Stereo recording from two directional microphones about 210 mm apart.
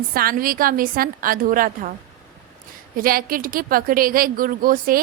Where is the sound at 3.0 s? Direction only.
45° right (ahead or behind).